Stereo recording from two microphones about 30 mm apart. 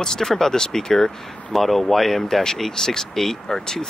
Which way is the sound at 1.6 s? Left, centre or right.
Centre.